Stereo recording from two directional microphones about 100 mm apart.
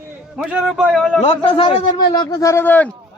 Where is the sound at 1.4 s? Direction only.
70° left (ahead or behind).